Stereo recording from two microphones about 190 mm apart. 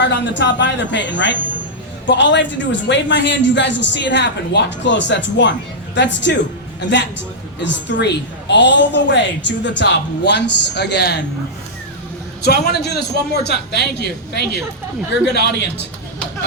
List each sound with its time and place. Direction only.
0.0 s a man's voice: 70° left (ahead or behind)
7.6 s a man's voice: 70° left (ahead or behind)
12.4 s a man's voice: 60° left (ahead or behind)